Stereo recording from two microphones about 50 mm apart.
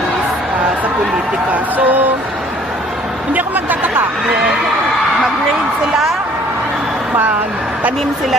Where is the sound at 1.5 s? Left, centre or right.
Right.